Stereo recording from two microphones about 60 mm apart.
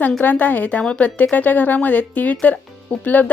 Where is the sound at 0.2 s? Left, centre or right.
Left.